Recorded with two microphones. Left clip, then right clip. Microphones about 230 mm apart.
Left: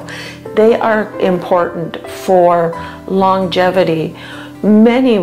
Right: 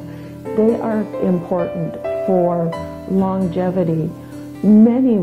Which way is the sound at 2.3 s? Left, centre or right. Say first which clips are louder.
Left 8 dB; left.